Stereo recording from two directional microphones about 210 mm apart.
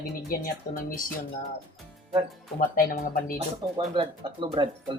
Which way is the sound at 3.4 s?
25° right (ahead or behind).